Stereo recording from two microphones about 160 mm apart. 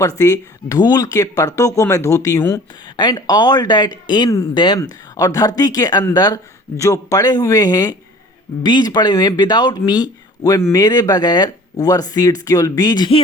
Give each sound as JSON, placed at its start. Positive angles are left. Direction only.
{"t": 0.2, "sound": "speech", "side_deg": 20}